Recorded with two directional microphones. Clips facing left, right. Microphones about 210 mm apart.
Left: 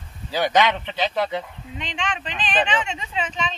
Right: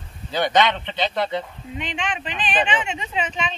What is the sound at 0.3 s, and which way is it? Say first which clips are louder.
Speech: even; 10° left (ahead or behind).